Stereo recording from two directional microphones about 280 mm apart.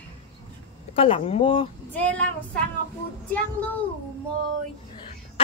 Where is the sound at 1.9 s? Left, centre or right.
Centre.